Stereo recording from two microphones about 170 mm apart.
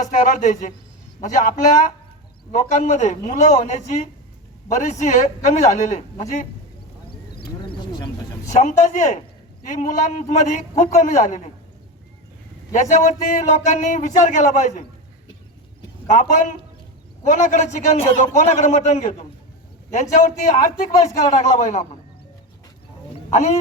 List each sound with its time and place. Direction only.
0.0 s a man's voice: 50° left (ahead or behind)
8.4 s a man's voice: 45° left (ahead or behind)
12.7 s a man's voice: 45° left (ahead or behind)
16.0 s a man's voice: 45° left (ahead or behind)